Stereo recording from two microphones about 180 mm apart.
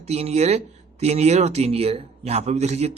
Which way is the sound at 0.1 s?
35° right (ahead or behind).